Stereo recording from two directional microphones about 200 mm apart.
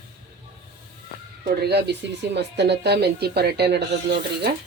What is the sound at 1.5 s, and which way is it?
Speech, 55° right (ahead or behind).